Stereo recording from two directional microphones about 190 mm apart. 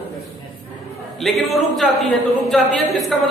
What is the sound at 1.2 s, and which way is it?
A woman's voice, centre (ahead or behind).